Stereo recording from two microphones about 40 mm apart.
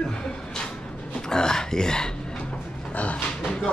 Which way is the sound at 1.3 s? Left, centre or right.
Centre.